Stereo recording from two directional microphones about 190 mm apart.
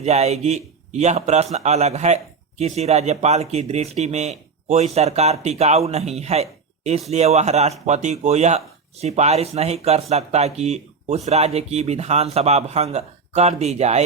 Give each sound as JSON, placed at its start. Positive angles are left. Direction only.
{"t": 0.0, "sound": "speech", "side_deg": -35}